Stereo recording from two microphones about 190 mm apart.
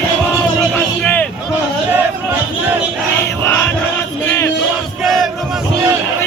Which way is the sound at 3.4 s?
10° left (ahead or behind).